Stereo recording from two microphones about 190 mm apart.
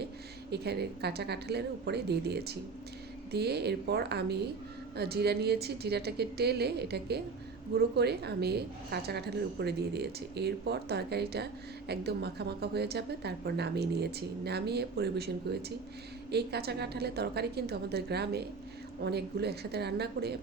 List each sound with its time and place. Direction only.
0.5 s a woman's voice: 60° right (ahead or behind)